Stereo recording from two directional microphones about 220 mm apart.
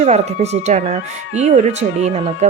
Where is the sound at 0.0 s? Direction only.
30° right (ahead or behind).